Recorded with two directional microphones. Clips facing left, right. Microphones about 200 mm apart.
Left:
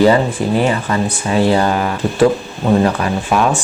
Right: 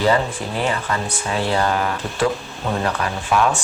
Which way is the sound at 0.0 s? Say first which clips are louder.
Left 7 dB; 10° left (ahead or behind).